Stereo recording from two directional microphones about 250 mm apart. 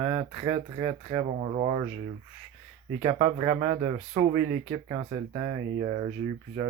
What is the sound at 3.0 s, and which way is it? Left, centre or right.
Speech, right.